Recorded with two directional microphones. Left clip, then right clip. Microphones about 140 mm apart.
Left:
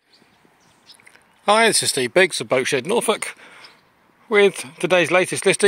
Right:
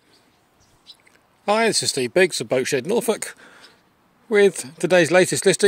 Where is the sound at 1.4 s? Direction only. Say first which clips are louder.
Left 3 dB; 10° right (ahead or behind); by 5.7 s 45° right (ahead or behind).